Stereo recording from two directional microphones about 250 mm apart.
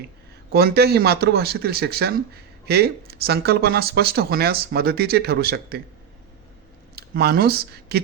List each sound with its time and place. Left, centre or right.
0.5 s speech: right
6.9 s speech: right